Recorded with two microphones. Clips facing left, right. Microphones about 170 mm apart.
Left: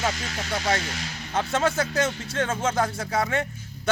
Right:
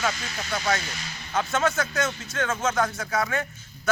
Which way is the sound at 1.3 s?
30° left (ahead or behind).